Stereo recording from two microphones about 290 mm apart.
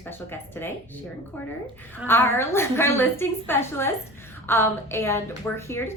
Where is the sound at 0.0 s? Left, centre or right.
Centre.